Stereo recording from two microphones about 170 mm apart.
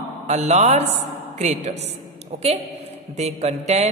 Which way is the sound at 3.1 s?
40° right (ahead or behind).